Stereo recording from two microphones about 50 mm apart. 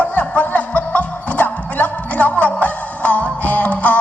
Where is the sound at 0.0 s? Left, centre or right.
Left.